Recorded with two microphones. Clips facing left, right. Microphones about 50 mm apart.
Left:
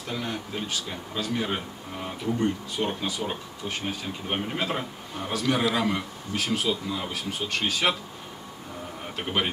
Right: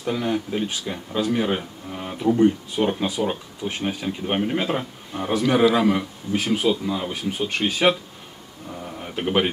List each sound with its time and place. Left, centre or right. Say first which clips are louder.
0.0 s speech: right 8 dB; centre
9.1 s speech: right 8 dB; centre